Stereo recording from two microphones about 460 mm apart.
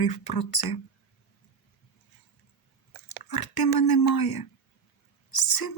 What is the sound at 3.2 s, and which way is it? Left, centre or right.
Speech, left.